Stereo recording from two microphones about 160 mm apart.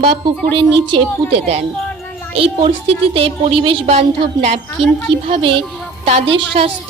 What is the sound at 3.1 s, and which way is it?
Speech, 35° right (ahead or behind).